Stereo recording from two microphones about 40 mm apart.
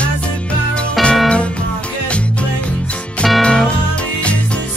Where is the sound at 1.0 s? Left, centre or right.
Centre.